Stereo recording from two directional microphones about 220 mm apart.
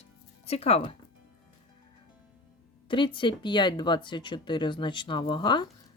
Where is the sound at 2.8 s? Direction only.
20° left (ahead or behind).